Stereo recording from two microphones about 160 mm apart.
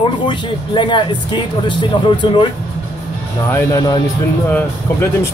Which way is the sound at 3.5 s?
20° left (ahead or behind).